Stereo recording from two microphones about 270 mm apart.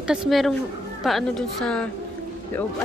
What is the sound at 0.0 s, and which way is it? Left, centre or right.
A woman's voice, centre.